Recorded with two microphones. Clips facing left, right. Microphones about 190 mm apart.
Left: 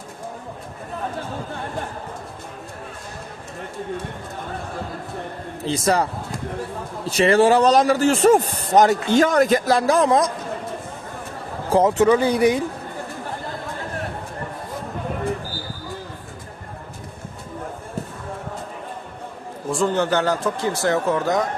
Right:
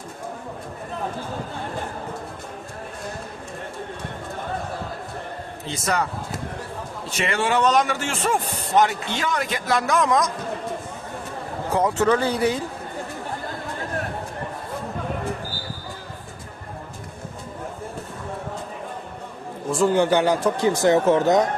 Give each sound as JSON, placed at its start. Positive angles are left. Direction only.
{"t": 5.6, "sound": "a man's voice", "side_deg": 30}
{"t": 7.1, "sound": "a man's voice", "side_deg": 35}
{"t": 11.7, "sound": "speech", "side_deg": 25}
{"t": 19.7, "sound": "speech", "side_deg": -5}